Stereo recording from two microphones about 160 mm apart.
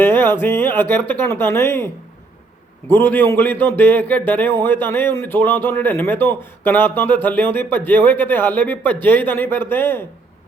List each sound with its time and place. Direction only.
0.0 s a man's voice: 15° left (ahead or behind)
2.9 s a man's voice: 10° left (ahead or behind)